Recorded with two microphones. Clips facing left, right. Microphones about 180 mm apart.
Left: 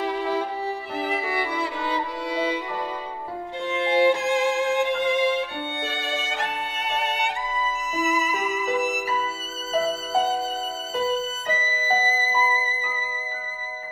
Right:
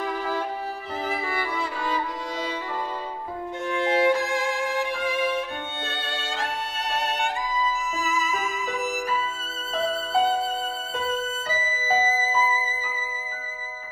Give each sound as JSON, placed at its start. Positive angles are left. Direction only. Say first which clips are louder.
{"t": 0.9, "sound": "violin", "louder": "left 1 dB", "side_deg": 15}
{"t": 3.7, "sound": "music", "louder": "left 2 dB", "side_deg": 25}
{"t": 9.7, "sound": "music", "louder": "left 2 dB", "side_deg": 5}